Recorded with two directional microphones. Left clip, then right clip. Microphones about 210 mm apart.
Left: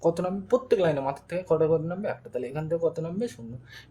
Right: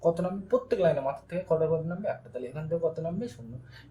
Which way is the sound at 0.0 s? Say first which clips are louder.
Left 1 dB; 50° left (ahead or behind).